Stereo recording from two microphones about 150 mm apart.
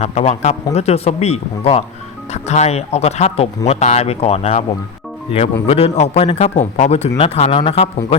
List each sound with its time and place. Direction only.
0.0 s speech: 45° left (ahead or behind)
5.6 s speech: 45° left (ahead or behind)